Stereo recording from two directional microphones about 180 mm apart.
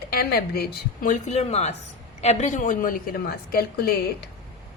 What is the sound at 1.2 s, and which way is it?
A woman's voice, 35° left (ahead or behind).